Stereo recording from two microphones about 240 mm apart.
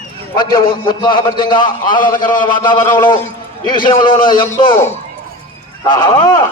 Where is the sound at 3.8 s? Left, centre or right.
Centre.